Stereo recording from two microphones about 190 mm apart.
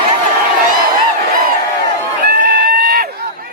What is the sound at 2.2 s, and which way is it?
Run, 55° right (ahead or behind).